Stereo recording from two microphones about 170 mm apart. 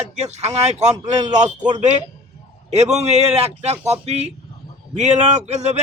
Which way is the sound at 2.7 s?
40° right (ahead or behind).